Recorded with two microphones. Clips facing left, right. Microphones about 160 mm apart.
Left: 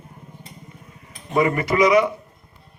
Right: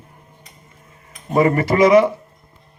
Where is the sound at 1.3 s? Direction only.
40° right (ahead or behind).